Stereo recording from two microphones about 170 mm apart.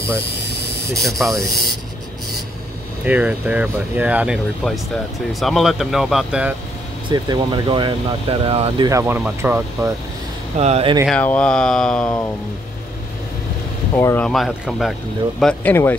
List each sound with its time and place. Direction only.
1.0 s speech: centre (ahead or behind)
3.1 s speech: 10° right (ahead or behind)
7.1 s speech: 25° right (ahead or behind)
8.8 s speech: 15° right (ahead or behind)
10.6 s speech: 35° right (ahead or behind)
11.1 s speech: 5° left (ahead or behind)
13.9 s speech: 15° left (ahead or behind)
14.3 s speech: centre (ahead or behind)
15.4 s speech: 10° left (ahead or behind)